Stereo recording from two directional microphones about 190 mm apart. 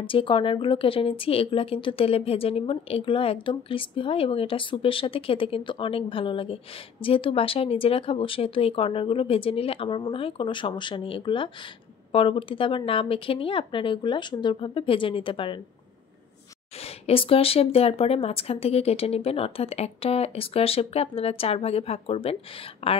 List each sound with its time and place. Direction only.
0.0 s speech: 25° left (ahead or behind)
17.0 s speech: 30° left (ahead or behind)